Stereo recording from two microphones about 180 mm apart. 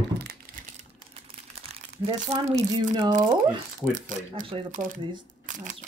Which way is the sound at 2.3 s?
35° right (ahead or behind).